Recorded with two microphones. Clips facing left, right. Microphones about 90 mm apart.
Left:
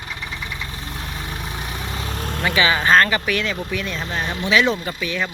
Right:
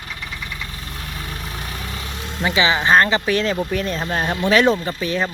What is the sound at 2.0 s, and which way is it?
Vehicle, 45° left (ahead or behind).